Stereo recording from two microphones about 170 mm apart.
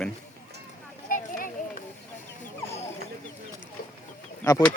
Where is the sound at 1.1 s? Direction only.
55° left (ahead or behind).